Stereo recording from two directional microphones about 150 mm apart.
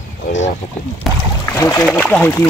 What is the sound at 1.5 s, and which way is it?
Speech, 20° left (ahead or behind).